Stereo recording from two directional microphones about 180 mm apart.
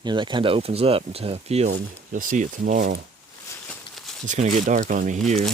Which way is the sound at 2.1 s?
45° right (ahead or behind).